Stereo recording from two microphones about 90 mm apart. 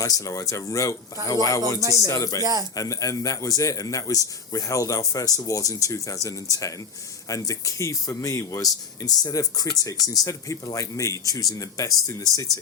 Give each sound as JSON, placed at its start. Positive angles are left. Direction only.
{"t": 0.0, "sound": "a man's voice", "side_deg": 40}
{"t": 1.8, "sound": "speech", "side_deg": -40}
{"t": 2.0, "sound": "a man's voice", "side_deg": 40}
{"t": 2.4, "sound": "speech", "side_deg": -45}
{"t": 2.7, "sound": "a man's voice", "side_deg": 40}